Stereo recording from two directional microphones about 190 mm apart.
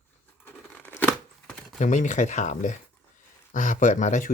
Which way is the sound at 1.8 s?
40° left (ahead or behind).